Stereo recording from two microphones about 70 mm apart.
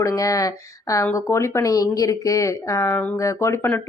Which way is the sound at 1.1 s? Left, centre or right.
Left.